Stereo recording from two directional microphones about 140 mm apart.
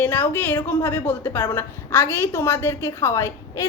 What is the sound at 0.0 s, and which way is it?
A woman's voice, 15° left (ahead or behind).